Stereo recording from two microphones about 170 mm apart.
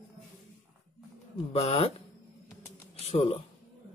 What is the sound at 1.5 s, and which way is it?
Speech, 35° left (ahead or behind).